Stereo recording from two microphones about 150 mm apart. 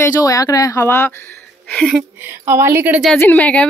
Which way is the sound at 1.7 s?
5° left (ahead or behind).